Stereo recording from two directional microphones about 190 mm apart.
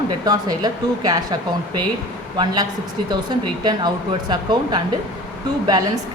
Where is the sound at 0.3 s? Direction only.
20° right (ahead or behind).